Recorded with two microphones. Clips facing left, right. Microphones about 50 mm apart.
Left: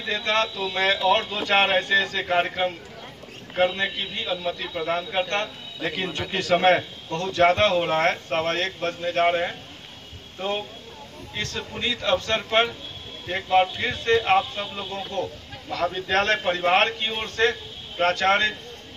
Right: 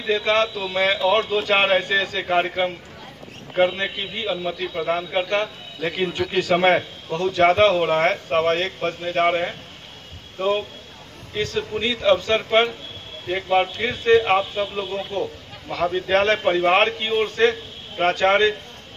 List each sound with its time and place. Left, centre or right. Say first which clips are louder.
0.0 s speech: right 4 dB; centre
11.3 s speech: right 7 dB; centre